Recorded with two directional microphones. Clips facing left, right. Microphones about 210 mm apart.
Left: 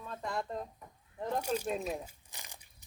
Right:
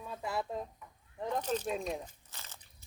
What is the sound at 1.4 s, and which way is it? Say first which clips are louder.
Speech: even; 10° left (ahead or behind).